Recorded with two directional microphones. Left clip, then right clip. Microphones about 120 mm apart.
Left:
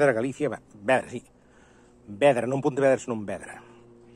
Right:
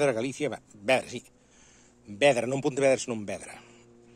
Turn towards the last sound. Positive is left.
turn(degrees=-30)  # may be behind; listen again after turning